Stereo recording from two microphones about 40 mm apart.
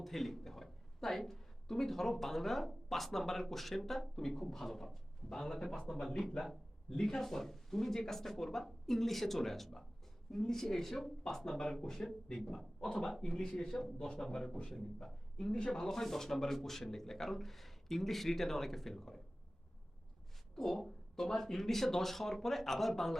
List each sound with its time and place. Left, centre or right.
0.0 s speech: centre
20.6 s speech: centre